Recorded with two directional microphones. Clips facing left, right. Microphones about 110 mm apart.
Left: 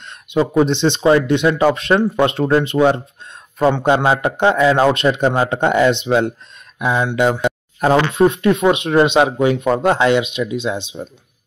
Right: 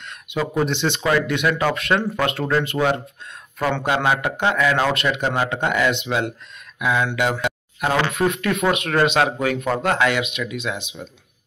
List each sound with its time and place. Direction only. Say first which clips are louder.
0.0 s speech: left 7 dB; 25° left (ahead or behind)